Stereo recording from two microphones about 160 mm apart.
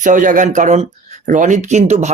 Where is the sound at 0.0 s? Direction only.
55° right (ahead or behind).